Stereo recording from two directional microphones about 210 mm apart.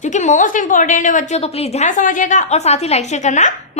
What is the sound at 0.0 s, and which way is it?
A woman's voice, 35° left (ahead or behind).